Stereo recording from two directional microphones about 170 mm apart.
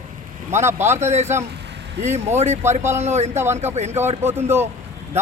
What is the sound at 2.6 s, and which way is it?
Speech, 15° right (ahead or behind).